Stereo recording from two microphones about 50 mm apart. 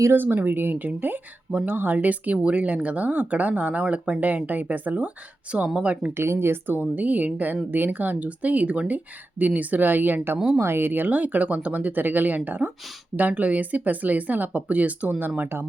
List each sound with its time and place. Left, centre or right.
0.1 s a woman's voice: right; by 5.9 s centre
6.1 s speech: right
6.7 s a woman's voice: right
10.3 s speech: right
10.6 s a woman's voice: right